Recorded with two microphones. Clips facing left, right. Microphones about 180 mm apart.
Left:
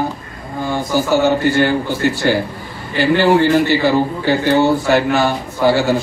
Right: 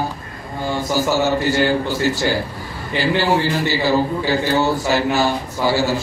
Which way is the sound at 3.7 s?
60° left (ahead or behind).